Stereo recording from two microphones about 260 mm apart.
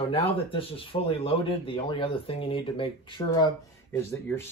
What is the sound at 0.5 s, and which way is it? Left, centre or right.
Speech, left.